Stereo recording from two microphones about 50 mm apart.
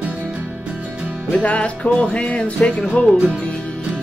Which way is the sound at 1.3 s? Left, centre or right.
Left.